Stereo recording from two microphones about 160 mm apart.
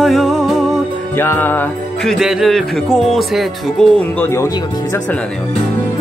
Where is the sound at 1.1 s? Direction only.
15° left (ahead or behind).